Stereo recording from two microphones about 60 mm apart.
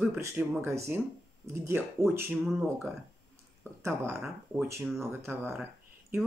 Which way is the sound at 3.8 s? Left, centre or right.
Right.